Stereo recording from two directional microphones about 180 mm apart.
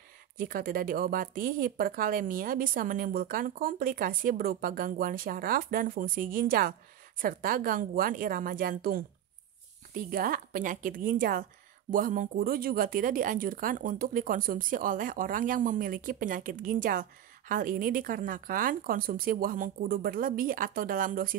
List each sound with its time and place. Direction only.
0.4 s speech: 50° right (ahead or behind)